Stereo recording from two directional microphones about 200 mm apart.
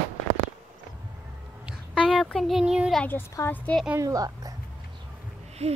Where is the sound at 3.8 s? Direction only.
15° right (ahead or behind).